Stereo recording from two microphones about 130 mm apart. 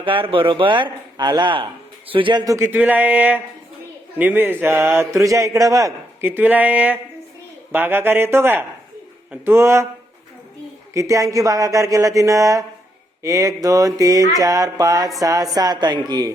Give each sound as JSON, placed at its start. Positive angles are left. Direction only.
{"t": 0.0, "sound": "a man's voice", "side_deg": -45}
{"t": 10.9, "sound": "speech", "side_deg": -25}